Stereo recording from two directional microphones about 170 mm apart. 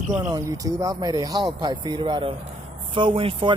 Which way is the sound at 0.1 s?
20° right (ahead or behind).